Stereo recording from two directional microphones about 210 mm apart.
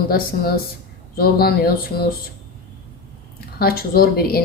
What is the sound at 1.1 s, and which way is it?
Speech, 45° left (ahead or behind).